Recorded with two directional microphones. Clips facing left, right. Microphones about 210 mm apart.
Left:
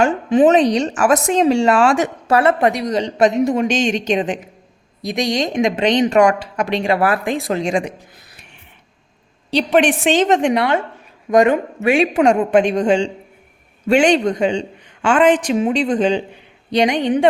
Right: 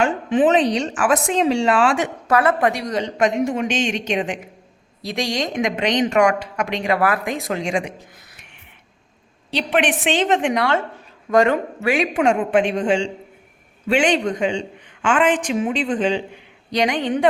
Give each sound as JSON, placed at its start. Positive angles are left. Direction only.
{"t": 0.0, "sound": "a woman's voice", "side_deg": 40}
{"t": 2.2, "sound": "a woman's voice", "side_deg": 25}
{"t": 5.0, "sound": "a woman's voice", "side_deg": 15}
{"t": 9.5, "sound": "a woman's voice", "side_deg": 35}
{"t": 10.6, "sound": "speech", "side_deg": 15}
{"t": 12.1, "sound": "a woman's voice", "side_deg": 40}
{"t": 16.7, "sound": "speech", "side_deg": 20}